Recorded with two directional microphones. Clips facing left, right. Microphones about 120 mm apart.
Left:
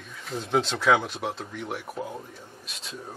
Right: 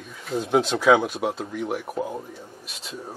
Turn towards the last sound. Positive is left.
turn(degrees=-5)  # may be behind; listen again after turning